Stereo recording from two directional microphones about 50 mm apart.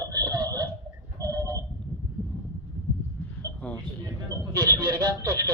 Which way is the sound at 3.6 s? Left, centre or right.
Left.